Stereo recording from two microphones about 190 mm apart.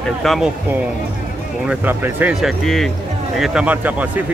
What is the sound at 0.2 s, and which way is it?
Speech, centre (ahead or behind).